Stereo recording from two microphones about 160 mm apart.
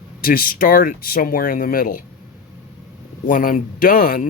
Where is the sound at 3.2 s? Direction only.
60° left (ahead or behind).